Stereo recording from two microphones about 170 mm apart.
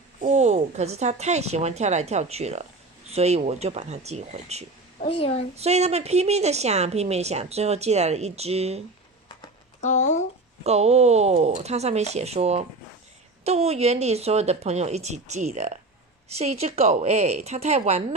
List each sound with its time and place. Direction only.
0.2 s speech: 40° right (ahead or behind)
4.9 s a woman's voice: 35° left (ahead or behind)
5.5 s speech: 40° right (ahead or behind)
9.8 s speech: 45° left (ahead or behind)
10.6 s speech: 40° right (ahead or behind)